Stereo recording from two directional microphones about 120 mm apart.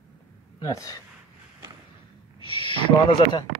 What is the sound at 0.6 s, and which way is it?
Speech, 25° left (ahead or behind).